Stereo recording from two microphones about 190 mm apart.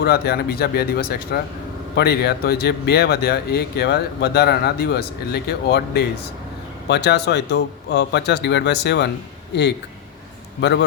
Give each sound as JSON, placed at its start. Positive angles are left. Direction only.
{"t": 0.0, "sound": "speech", "side_deg": 55}